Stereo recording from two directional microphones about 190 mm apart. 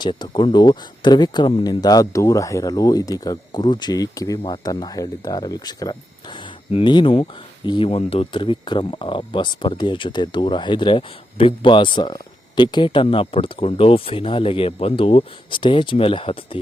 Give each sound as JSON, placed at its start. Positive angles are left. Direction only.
{"t": 0.0, "sound": "speech", "side_deg": 25}